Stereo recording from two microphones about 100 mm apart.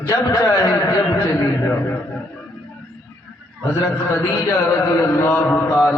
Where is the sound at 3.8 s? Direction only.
30° left (ahead or behind).